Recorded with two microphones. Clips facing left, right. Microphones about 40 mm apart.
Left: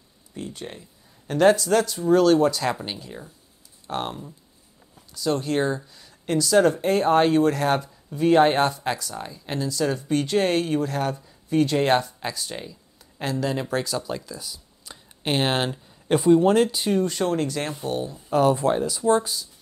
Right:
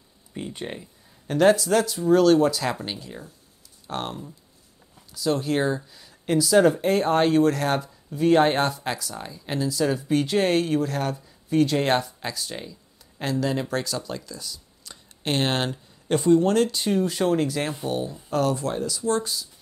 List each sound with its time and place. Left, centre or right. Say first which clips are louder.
0.3 s speech: right 2 dB; centre
1.2 s speech: even; centre
18.5 s speech: left 5 dB; left